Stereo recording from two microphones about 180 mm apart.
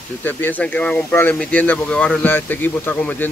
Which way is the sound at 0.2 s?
10° left (ahead or behind).